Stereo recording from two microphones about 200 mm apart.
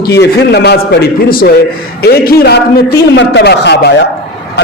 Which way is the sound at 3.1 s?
65° left (ahead or behind).